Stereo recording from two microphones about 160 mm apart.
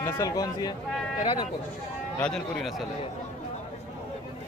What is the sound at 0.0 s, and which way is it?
Speech, 20° left (ahead or behind).